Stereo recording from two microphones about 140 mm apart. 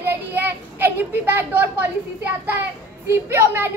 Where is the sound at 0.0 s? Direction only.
15° right (ahead or behind).